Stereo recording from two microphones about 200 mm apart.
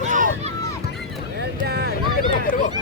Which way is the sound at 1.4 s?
55° right (ahead or behind).